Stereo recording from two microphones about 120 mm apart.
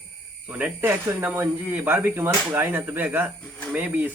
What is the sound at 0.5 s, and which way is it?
Speech, 15° right (ahead or behind).